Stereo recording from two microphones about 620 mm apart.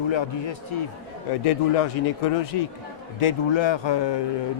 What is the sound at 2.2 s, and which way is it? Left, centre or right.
Speech, left.